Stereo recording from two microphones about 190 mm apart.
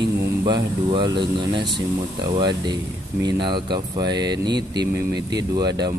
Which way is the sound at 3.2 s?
25° right (ahead or behind).